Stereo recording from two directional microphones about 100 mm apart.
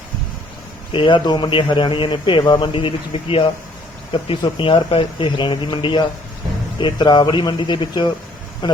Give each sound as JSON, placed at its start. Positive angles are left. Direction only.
{"t": 0.9, "sound": "a man's voice", "side_deg": 50}